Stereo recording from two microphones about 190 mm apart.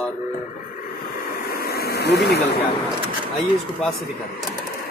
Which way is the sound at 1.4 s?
55° left (ahead or behind).